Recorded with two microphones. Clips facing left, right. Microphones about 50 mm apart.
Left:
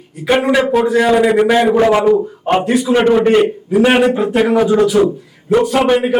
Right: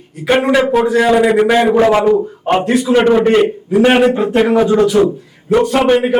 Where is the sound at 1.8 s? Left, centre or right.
Right.